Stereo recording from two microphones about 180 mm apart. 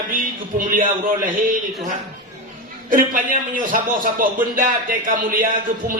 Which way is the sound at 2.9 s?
50° right (ahead or behind).